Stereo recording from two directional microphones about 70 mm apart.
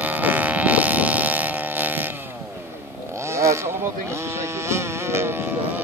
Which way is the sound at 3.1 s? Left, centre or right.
Right.